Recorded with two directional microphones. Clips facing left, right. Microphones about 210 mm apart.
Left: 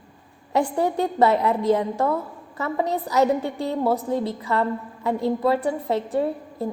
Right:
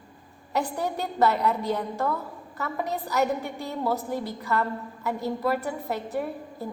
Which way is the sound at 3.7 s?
30° left (ahead or behind).